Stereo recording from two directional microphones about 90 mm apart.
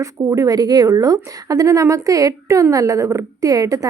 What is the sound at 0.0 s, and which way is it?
A woman's voice, 40° right (ahead or behind).